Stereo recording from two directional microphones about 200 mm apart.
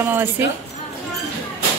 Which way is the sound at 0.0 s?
10° right (ahead or behind).